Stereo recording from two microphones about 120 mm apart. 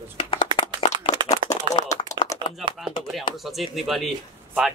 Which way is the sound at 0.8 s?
45° left (ahead or behind).